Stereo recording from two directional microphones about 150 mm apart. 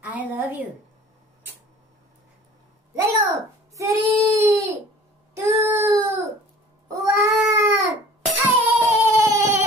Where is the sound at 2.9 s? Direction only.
20° right (ahead or behind).